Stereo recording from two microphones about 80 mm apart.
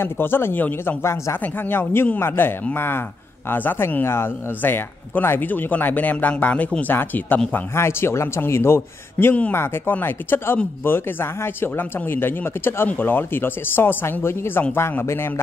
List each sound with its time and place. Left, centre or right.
0.0 s a man's voice: left